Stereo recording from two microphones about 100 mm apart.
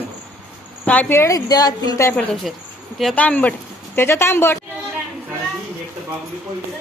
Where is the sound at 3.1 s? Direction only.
15° left (ahead or behind).